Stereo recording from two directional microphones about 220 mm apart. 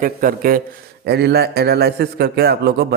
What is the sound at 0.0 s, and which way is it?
A man's voice, 40° right (ahead or behind).